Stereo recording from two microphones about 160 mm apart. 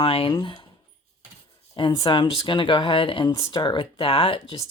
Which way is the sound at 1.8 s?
35° left (ahead or behind).